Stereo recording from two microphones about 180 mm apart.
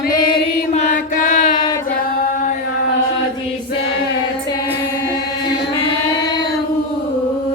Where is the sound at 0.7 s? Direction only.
45° left (ahead or behind).